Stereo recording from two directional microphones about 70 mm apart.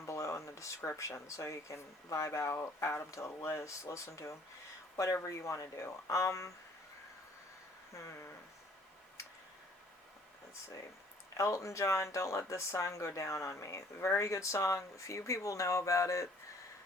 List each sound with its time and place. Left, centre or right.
0.0 s a sound: left
0.8 s speech: left
7.9 s speech: left
11.3 s speech: left